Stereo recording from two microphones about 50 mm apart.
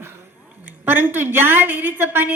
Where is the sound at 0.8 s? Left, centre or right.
Right.